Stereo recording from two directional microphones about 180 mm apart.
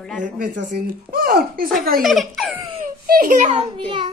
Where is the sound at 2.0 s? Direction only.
Centre (ahead or behind).